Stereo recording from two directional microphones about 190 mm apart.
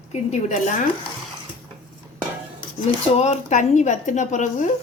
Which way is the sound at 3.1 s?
35° left (ahead or behind).